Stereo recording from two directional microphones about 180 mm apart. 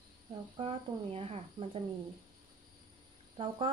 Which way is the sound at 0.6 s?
30° right (ahead or behind).